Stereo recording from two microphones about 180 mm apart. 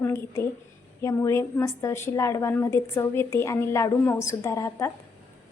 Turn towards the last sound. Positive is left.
turn(degrees=15)  # may be behind; listen again after turning